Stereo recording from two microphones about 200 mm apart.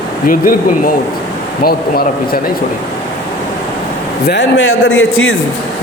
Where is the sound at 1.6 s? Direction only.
50° left (ahead or behind).